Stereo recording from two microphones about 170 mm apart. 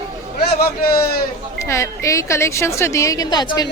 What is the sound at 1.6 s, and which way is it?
Speech, 15° left (ahead or behind).